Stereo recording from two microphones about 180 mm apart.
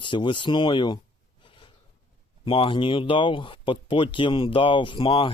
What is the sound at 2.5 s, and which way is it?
Speech, 30° left (ahead or behind).